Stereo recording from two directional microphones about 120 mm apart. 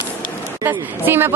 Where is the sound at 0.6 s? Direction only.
20° right (ahead or behind).